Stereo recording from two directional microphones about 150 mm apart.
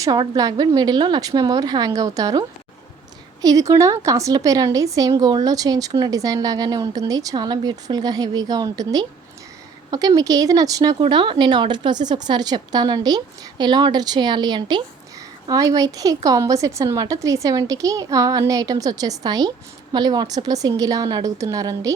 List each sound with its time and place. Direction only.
0.0 s a woman's voice: 25° right (ahead or behind)
3.4 s a woman's voice: 25° right (ahead or behind)
10.2 s a woman's voice: 25° right (ahead or behind)